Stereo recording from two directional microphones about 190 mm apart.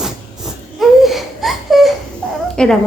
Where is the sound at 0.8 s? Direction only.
Centre (ahead or behind).